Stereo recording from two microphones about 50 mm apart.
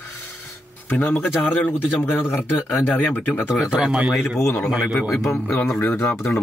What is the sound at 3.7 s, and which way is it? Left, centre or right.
A man's voice, right.